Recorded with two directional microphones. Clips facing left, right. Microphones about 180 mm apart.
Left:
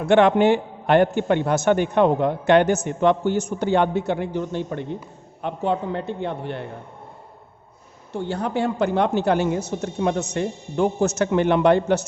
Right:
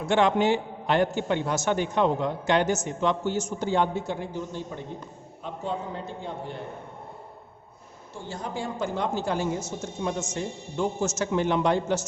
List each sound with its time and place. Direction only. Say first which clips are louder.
0.0 s a man's voice: left 6 dB; 60° left (ahead or behind)
8.1 s a man's voice: left 9 dB; 65° left (ahead or behind)